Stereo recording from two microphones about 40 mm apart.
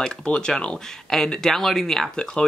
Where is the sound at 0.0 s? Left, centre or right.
Left.